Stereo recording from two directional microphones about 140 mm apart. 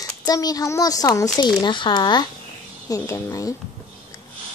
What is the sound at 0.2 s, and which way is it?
Speech, 25° left (ahead or behind).